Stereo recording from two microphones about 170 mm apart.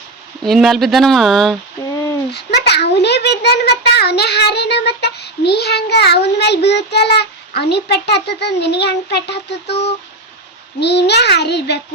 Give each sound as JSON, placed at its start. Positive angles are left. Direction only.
{"t": 0.4, "sound": "speech", "side_deg": 0}
{"t": 2.3, "sound": "a child's voice", "side_deg": 75}
{"t": 10.8, "sound": "a child's voice", "side_deg": 85}